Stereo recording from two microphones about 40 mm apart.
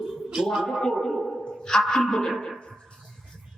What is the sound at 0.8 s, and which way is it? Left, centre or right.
Speech, centre.